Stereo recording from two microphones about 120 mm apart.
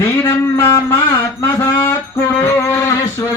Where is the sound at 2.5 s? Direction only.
25° left (ahead or behind).